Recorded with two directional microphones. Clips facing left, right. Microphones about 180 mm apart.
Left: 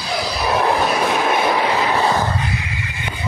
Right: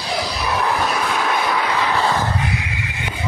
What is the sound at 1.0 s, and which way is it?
Vehicle, 25° left (ahead or behind).